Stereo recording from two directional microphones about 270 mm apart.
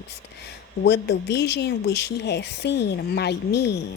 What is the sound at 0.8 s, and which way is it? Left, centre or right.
A woman's voice, left.